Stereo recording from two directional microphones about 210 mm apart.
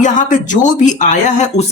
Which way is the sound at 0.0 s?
35° left (ahead or behind).